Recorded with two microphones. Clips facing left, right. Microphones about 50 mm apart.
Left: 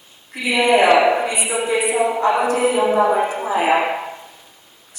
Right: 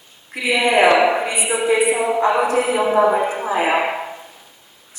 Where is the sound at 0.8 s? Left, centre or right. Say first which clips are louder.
Right 2 dB; centre.